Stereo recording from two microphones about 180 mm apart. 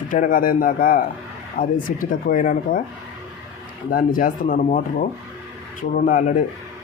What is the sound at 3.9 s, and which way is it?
Speech, 50° left (ahead or behind).